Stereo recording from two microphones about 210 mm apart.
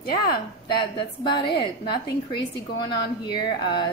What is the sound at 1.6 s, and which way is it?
A woman's voice, 20° left (ahead or behind).